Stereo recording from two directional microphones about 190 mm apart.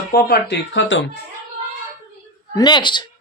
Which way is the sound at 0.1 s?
55° left (ahead or behind).